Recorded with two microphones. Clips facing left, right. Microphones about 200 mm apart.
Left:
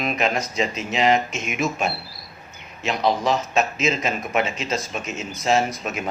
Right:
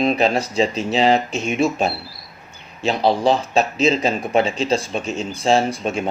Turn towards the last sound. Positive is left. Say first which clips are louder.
# right 4 dB
turn(degrees=-30)  # may be behind; listen again after turning